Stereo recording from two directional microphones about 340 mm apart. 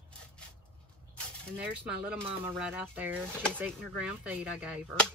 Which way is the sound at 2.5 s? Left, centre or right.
Centre.